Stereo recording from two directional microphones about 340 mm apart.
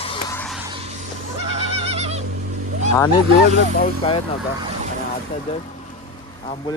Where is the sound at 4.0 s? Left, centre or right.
Centre.